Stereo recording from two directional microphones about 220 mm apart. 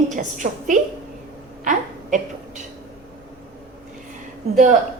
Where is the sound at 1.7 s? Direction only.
35° right (ahead or behind).